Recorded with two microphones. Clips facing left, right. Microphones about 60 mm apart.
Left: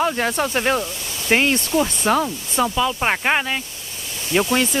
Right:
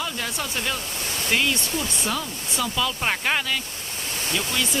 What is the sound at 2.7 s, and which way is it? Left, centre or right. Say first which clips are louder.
Speech: left 5 dB; left.